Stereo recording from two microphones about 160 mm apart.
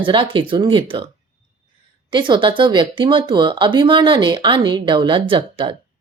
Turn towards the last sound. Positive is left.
turn(degrees=-35)  # may be behind; listen again after turning